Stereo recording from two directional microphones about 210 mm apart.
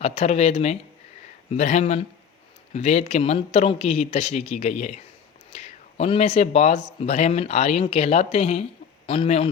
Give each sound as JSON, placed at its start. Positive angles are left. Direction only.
{"t": 0.0, "sound": "a man's voice", "side_deg": 30}